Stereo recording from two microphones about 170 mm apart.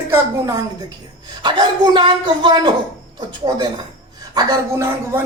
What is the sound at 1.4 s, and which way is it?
A woman's voice, 25° right (ahead or behind).